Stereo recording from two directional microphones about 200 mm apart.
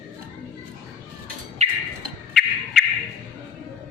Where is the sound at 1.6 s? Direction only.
35° right (ahead or behind).